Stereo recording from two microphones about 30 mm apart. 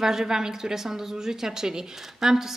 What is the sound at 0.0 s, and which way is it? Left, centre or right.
A woman's voice, centre.